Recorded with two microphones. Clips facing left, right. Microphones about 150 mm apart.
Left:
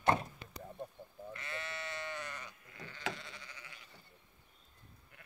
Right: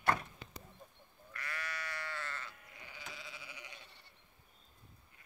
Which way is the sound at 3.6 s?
20° right (ahead or behind).